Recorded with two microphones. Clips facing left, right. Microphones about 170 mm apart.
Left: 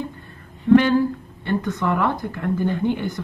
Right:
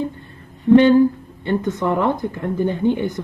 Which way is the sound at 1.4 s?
20° right (ahead or behind).